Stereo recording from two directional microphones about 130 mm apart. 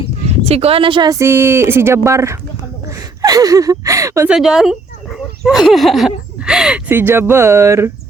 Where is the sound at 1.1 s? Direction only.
20° right (ahead or behind).